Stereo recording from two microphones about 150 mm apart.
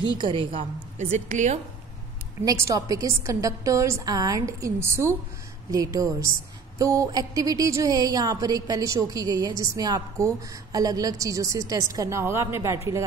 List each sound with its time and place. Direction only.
0.1 s a woman's voice: 30° right (ahead or behind)
0.5 s a woman's voice: 50° right (ahead or behind)
2.4 s a woman's voice: 20° right (ahead or behind)